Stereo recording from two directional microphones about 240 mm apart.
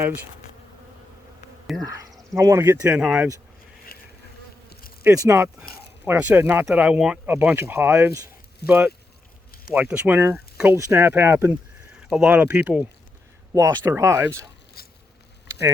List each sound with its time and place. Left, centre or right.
1.8 s speech: centre
3.9 s insect: left
5.0 s speech: centre
14.8 s a sound: left